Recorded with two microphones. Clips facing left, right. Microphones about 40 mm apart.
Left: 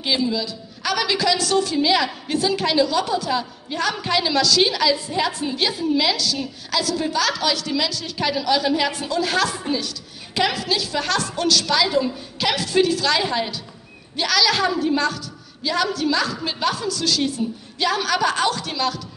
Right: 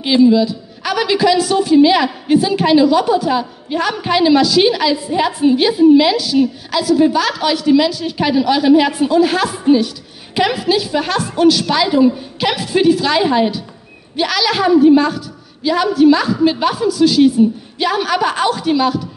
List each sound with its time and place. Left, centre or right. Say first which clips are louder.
0.0 s a woman's voice: right 11 dB; right